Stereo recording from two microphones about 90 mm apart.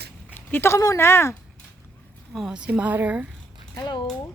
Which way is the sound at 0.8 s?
35° left (ahead or behind).